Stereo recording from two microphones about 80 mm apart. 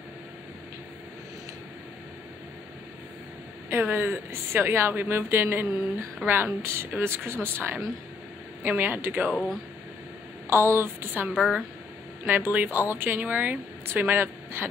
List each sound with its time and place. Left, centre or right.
3.7 s a woman's voice: right
10.5 s speech: right
11.3 s speech: centre
12.3 s a woman's voice: right